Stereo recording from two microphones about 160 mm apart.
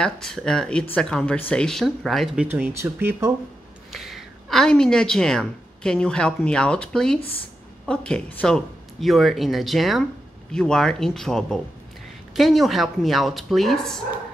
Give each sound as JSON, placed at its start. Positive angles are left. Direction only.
{"t": 0.0, "sound": "speech", "side_deg": 5}
{"t": 2.4, "sound": "speech", "side_deg": -10}
{"t": 3.9, "sound": "a woman's voice", "side_deg": 0}